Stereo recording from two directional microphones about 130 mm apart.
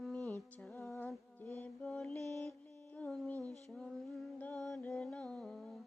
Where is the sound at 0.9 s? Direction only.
15° left (ahead or behind).